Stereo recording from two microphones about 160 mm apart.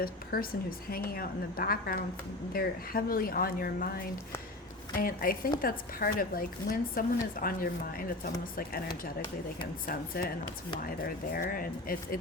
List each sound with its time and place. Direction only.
0.0 s a woman's voice: 65° left (ahead or behind)
9.8 s speech: 65° left (ahead or behind)